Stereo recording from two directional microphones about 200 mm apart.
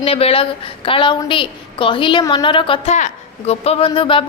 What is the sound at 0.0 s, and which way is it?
A woman's voice, 30° left (ahead or behind).